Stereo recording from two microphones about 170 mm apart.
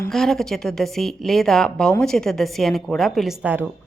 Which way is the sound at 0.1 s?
Centre (ahead or behind).